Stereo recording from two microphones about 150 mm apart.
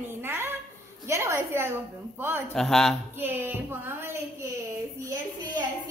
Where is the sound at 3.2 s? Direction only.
15° right (ahead or behind).